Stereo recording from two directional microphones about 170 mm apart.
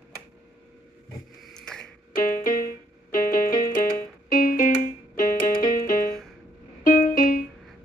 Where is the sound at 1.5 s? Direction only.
5° left (ahead or behind).